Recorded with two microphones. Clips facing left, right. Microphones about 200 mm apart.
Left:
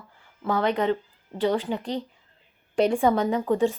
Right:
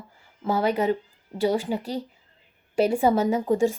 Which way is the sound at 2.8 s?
5° right (ahead or behind).